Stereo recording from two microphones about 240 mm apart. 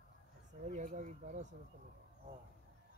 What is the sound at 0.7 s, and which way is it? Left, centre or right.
Speech, right.